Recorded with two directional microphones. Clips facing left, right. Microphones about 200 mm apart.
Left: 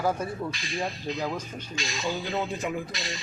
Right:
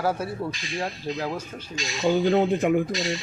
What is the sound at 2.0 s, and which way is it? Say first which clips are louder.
Speech: right 11 dB; 55° right (ahead or behind).